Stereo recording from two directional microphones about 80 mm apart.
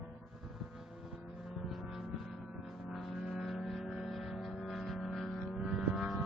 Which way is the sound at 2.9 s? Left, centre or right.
Centre.